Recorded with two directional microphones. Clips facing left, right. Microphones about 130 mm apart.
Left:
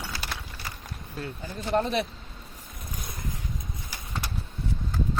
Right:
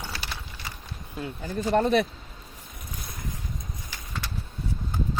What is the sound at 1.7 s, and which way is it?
Speech, 55° right (ahead or behind).